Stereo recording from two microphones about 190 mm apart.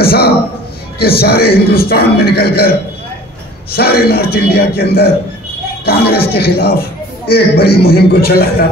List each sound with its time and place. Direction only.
0.0 s a sound: 55° left (ahead or behind)
0.9 s a man's voice: 55° left (ahead or behind)
3.7 s a man's voice: 55° left (ahead or behind)